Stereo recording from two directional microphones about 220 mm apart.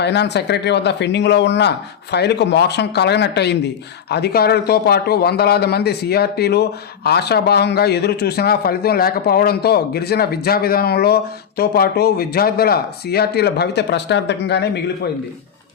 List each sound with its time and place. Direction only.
0.0 s a man's voice: 50° left (ahead or behind)